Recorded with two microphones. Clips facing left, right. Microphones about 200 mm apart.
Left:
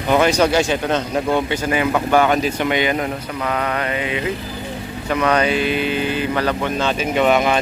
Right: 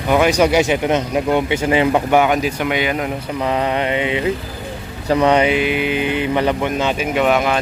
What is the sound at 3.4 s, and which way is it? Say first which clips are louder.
Mantra: right 3 dB; 25° right (ahead or behind).